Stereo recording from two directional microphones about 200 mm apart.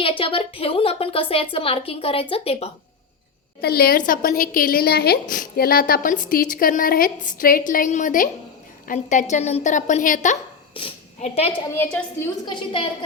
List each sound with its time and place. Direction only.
0.0 s a woman's voice: 25° left (ahead or behind)
3.6 s a woman's voice: 50° left (ahead or behind)
10.8 s a woman's voice: 30° left (ahead or behind)
11.8 s a woman's voice: 10° left (ahead or behind)
12.5 s a woman's voice: 25° left (ahead or behind)